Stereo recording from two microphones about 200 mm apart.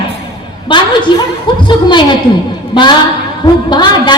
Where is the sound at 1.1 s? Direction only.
25° left (ahead or behind).